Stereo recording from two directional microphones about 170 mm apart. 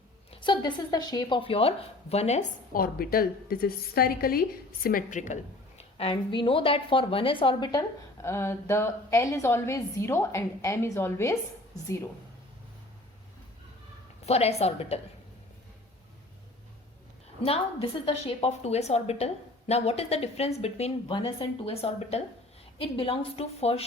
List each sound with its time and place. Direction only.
0.3 s a woman's voice: 30° left (ahead or behind)
2.7 s a woman's voice: 60° left (ahead or behind); by 11.3 s 15° left (ahead or behind)
14.3 s a woman's voice: 35° left (ahead or behind)
17.4 s a woman's voice: 35° left (ahead or behind)